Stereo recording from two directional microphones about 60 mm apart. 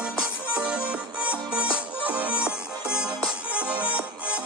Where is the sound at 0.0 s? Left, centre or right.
Centre.